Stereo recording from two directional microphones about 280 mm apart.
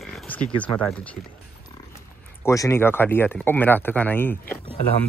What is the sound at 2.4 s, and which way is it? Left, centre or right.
A man's voice, centre.